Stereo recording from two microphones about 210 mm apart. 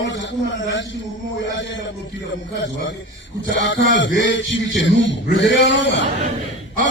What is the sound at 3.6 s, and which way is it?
A man's voice, 60° left (ahead or behind).